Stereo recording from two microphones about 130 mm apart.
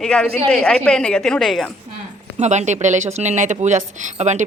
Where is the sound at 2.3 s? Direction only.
60° right (ahead or behind).